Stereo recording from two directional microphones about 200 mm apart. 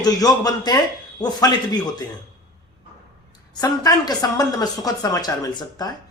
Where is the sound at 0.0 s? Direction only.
20° left (ahead or behind).